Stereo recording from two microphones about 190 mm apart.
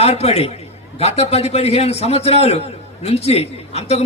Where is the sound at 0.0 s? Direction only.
35° left (ahead or behind).